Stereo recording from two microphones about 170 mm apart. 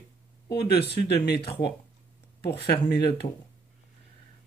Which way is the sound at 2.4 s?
70° left (ahead or behind).